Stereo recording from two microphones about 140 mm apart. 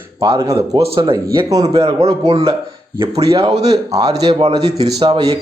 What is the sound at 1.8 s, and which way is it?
Speech, 40° right (ahead or behind).